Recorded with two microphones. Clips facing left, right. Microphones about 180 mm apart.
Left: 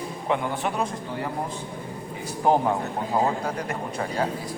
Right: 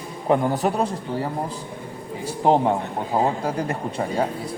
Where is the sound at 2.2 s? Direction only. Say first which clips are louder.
Right 3 dB; 25° right (ahead or behind).